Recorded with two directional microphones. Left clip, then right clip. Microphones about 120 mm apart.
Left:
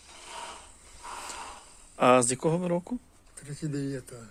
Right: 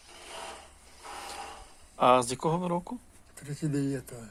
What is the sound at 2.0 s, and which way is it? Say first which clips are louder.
Speech: left 1 dB; 90° left.